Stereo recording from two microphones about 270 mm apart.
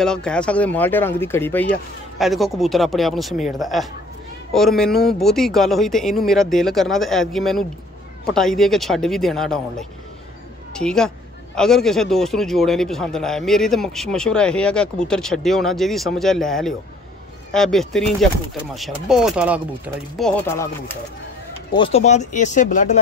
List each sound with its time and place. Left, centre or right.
0.0 s a man's voice: centre
21.7 s speech: left